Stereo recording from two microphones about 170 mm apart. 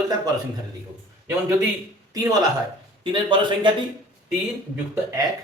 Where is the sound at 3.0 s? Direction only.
30° right (ahead or behind).